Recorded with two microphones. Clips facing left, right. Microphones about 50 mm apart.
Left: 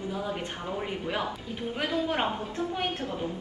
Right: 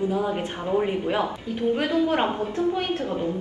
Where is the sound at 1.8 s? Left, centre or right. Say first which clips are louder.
Right 3 dB; right.